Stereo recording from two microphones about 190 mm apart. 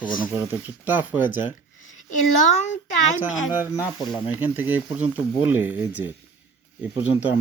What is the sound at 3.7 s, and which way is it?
Speech, 20° left (ahead or behind).